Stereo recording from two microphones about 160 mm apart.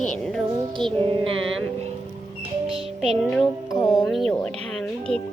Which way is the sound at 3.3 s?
20° left (ahead or behind).